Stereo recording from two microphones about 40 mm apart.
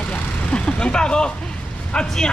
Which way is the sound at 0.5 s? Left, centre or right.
Left.